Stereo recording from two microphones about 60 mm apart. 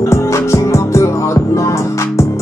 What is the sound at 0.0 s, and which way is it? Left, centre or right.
Music, left.